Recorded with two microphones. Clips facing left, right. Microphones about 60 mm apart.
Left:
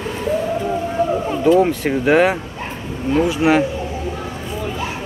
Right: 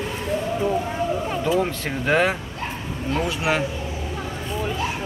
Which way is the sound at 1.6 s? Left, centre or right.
Centre.